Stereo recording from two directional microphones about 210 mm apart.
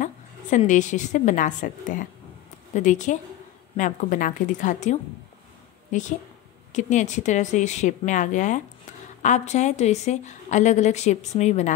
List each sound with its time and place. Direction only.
0.0 s a woman's voice: 35° left (ahead or behind)